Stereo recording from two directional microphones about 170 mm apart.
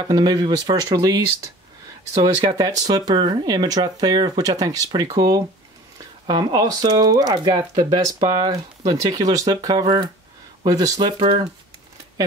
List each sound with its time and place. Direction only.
0.1 s speech: 25° right (ahead or behind)
2.2 s speech: 25° right (ahead or behind)